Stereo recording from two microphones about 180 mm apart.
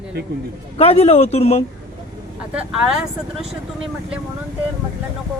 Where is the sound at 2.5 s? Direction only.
5° right (ahead or behind).